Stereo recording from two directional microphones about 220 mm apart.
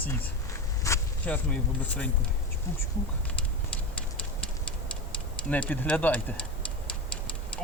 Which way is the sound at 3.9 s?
5° left (ahead or behind).